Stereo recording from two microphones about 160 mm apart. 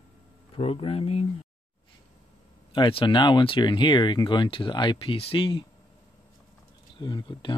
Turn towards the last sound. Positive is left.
turn(degrees=30)  # may be behind; listen again after turning